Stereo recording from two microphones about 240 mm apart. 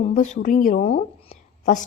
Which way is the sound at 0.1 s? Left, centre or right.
Left.